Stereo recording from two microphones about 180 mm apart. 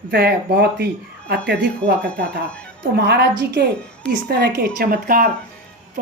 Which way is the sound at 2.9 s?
65° right (ahead or behind).